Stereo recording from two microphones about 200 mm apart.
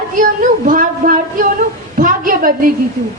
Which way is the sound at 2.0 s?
45° right (ahead or behind).